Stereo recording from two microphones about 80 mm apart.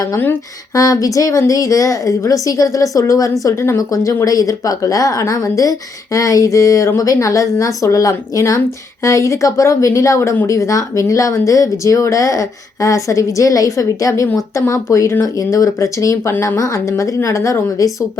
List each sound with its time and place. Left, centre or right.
0.7 s speech: left
3.4 s a woman's voice: left
3.8 s a woman's voice: left